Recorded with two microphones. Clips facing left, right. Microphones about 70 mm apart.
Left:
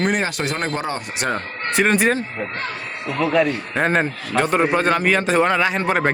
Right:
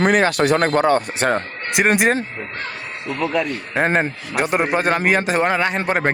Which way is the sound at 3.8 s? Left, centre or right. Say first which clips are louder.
Even; centre.